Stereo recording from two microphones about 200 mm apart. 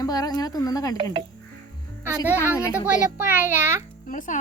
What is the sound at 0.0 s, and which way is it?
Speech, 20° left (ahead or behind).